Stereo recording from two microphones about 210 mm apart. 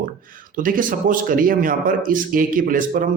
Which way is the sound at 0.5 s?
40° right (ahead or behind).